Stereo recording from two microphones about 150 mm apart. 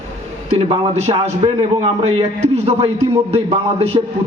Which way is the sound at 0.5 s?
45° right (ahead or behind).